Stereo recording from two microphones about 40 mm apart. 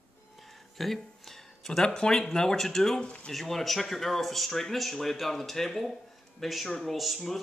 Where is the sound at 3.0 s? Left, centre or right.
Left.